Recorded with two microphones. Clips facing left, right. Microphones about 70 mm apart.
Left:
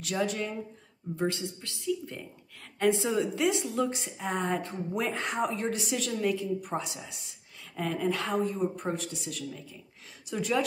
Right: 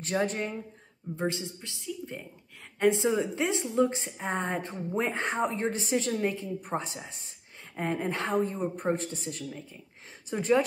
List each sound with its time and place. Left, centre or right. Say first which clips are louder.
0.0 s speech: right 1 dB; right
1.1 s a woman's voice: left 1 dB; right